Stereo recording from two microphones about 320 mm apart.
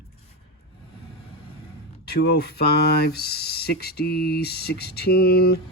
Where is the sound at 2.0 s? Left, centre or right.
Left.